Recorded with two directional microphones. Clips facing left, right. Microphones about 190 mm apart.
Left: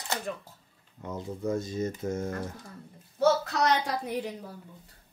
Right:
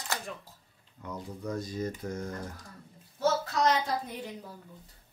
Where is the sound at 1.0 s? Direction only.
25° left (ahead or behind).